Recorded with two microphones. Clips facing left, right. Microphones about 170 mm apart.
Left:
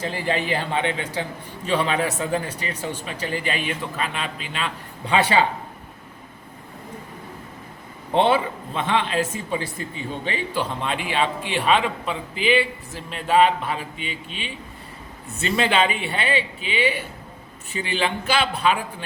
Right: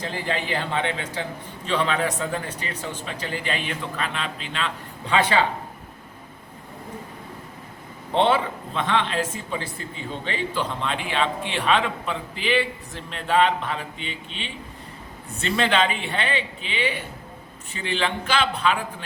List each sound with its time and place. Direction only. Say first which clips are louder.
0.0 s a man's voice: left 3 dB; 15° left (ahead or behind)
8.1 s a man's voice: left 1 dB; 10° left (ahead or behind)